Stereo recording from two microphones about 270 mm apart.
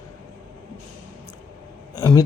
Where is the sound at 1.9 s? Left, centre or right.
Centre.